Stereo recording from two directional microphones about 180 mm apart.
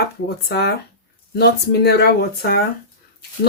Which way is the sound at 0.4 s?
65° left (ahead or behind).